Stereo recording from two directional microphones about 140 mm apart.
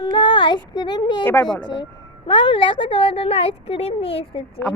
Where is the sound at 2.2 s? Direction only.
35° left (ahead or behind).